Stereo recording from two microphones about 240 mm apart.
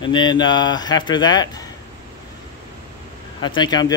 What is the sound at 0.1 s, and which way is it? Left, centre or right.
Speech, centre.